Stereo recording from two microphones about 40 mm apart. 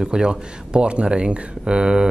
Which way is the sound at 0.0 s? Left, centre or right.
Centre.